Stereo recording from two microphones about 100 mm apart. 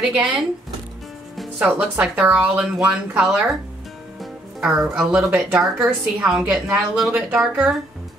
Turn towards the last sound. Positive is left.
turn(degrees=-5)  # may be behind; listen again after turning